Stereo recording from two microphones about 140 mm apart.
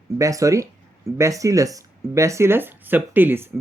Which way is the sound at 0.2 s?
25° right (ahead or behind).